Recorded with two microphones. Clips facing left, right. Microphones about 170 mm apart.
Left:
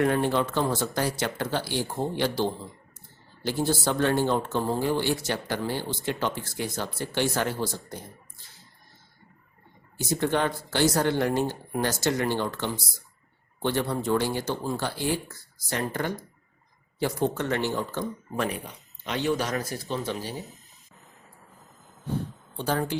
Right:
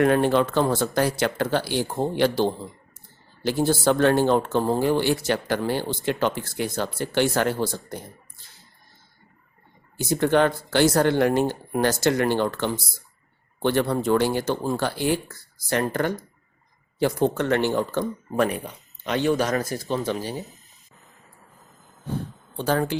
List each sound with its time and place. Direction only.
0.0 s speech: 65° right (ahead or behind)
0.6 s speech: 55° right (ahead or behind)
10.0 s speech: 65° right (ahead or behind); by 20.3 s 50° right (ahead or behind)
22.5 s speech: 90° right